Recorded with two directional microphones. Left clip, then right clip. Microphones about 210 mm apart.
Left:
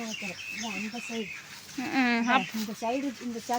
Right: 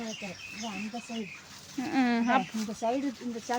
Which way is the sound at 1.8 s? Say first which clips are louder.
Left 2 dB; 10° right (ahead or behind).